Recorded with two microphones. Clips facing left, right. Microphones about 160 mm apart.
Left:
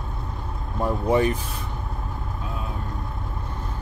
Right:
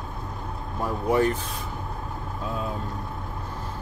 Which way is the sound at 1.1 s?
15° left (ahead or behind).